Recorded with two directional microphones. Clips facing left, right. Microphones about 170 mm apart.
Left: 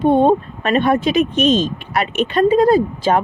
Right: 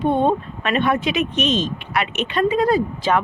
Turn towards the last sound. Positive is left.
turn(degrees=40)  # may be behind; listen again after turning